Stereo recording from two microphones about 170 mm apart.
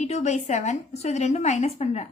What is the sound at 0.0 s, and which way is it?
Speech, 40° left (ahead or behind).